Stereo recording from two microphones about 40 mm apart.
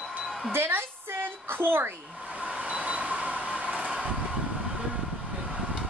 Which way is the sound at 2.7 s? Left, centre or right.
Right.